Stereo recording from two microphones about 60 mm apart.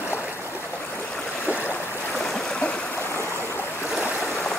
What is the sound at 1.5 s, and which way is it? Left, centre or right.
Stream, left.